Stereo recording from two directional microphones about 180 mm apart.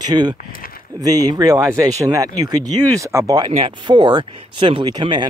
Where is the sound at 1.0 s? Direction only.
20° right (ahead or behind).